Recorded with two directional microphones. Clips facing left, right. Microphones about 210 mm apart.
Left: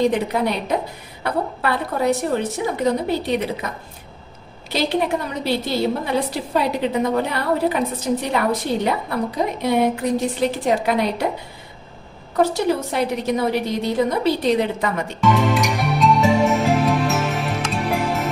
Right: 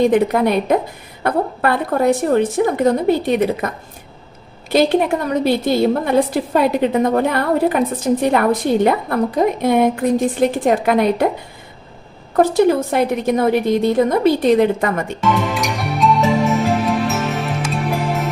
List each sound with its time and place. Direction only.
0.1 s a woman's voice: 55° right (ahead or behind)
4.7 s a woman's voice: 50° right (ahead or behind)
12.4 s a woman's voice: 50° right (ahead or behind)
15.4 s music: centre (ahead or behind)